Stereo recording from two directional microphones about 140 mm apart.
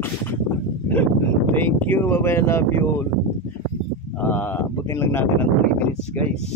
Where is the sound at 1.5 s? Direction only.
15° left (ahead or behind).